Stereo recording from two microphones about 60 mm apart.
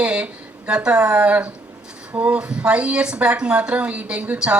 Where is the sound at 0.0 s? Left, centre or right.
Centre.